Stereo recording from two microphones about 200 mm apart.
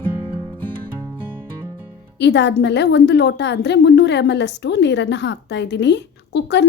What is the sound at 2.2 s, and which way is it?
A woman's voice, 60° left (ahead or behind).